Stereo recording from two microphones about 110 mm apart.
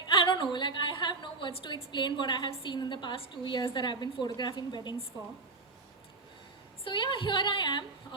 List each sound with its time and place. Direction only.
0.0 s a sound: 45° left (ahead or behind)
2.5 s a woman's voice: 45° left (ahead or behind)
6.8 s a woman's voice: 50° left (ahead or behind)